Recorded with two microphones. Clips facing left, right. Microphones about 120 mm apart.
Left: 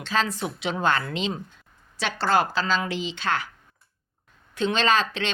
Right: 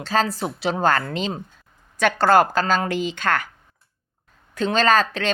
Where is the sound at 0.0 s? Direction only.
40° right (ahead or behind).